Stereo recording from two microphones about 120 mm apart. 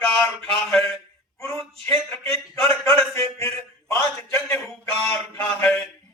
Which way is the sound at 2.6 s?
25° left (ahead or behind).